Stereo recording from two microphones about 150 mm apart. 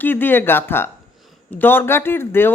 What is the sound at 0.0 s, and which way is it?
Speech, 15° left (ahead or behind).